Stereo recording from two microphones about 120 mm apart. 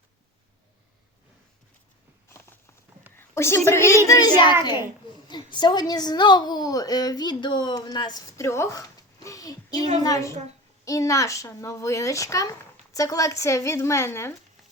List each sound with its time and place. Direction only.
2.3 s a sound: 20° left (ahead or behind)
3.2 s a woman's voice: 20° left (ahead or behind)
8.4 s a woman's voice: 25° left (ahead or behind)